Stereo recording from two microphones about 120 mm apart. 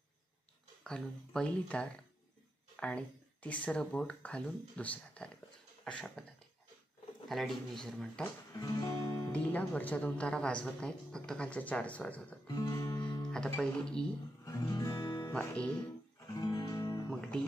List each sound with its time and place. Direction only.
0.8 s speech: 5° left (ahead or behind)
7.2 s speech: centre (ahead or behind)
8.5 s music: 25° left (ahead or behind)
9.3 s speech: 10° left (ahead or behind)
12.4 s music: 30° left (ahead or behind)
13.3 s speech: 5° left (ahead or behind)
14.4 s music: 30° left (ahead or behind)
15.3 s speech: 10° left (ahead or behind)
16.3 s guitar: 35° left (ahead or behind)
16.7 s music: 25° left (ahead or behind)
17.1 s music: 5° left (ahead or behind)